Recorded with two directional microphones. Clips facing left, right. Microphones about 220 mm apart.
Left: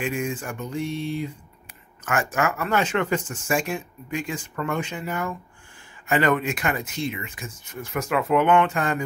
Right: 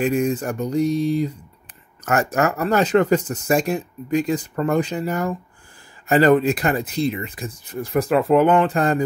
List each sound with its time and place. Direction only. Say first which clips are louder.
0.0 s speech: right 8 dB; 40° right (ahead or behind)